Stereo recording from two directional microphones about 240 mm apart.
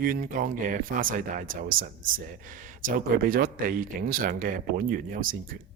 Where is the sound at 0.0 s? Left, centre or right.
Right.